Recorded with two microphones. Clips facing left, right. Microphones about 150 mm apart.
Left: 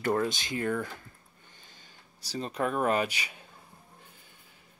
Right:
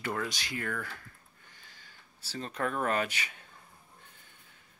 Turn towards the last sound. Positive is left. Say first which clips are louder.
# left 3 dB
turn(degrees=10)  # may be behind; listen again after turning